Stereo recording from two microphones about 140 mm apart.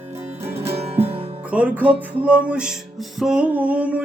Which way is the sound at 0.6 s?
45° right (ahead or behind).